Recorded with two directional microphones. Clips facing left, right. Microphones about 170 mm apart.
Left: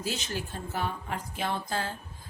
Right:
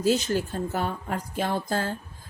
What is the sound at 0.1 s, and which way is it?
Speech, 45° right (ahead or behind).